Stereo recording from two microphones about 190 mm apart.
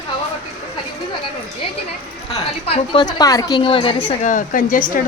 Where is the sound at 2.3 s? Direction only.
30° left (ahead or behind).